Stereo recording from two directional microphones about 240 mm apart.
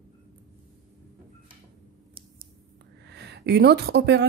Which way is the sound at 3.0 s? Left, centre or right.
Right.